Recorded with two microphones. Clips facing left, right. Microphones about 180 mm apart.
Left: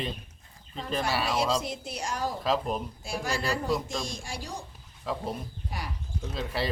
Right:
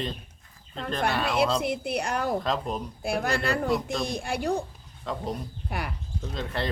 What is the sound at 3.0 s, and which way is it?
A woman's voice, 60° right (ahead or behind).